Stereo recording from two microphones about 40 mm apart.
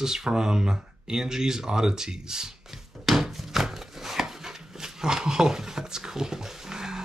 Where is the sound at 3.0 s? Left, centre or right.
Centre.